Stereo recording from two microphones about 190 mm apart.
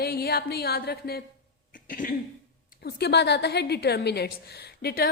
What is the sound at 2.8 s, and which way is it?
A woman's voice, 60° left (ahead or behind).